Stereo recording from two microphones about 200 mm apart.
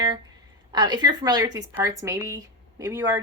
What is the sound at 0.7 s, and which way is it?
A woman's voice, 20° right (ahead or behind).